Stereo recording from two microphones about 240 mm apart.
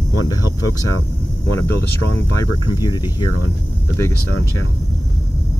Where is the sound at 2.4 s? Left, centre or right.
Centre.